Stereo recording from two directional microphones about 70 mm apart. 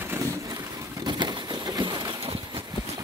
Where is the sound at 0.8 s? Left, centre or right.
Right.